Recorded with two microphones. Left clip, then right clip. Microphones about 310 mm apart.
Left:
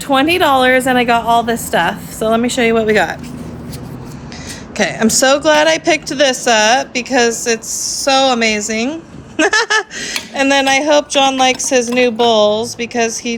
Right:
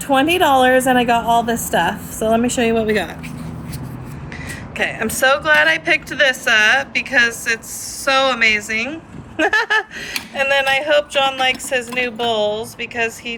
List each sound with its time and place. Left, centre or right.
0.3 s speech: centre
2.6 s speech: centre
4.8 s speech: centre